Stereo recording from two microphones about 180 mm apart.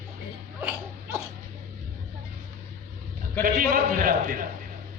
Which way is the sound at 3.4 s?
50° right (ahead or behind).